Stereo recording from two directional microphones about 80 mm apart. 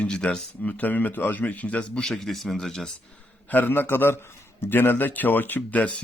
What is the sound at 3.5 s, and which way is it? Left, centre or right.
A man's voice, left.